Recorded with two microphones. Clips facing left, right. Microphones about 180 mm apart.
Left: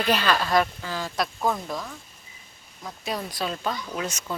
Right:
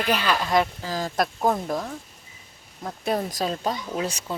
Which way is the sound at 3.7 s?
25° right (ahead or behind).